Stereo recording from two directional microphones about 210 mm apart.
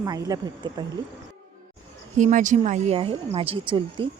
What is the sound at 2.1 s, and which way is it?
A woman's voice, 35° right (ahead or behind).